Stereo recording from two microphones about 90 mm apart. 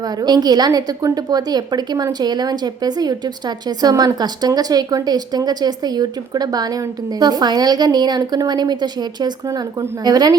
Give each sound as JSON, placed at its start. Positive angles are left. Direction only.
{"t": 0.0, "sound": "a woman's voice", "side_deg": -45}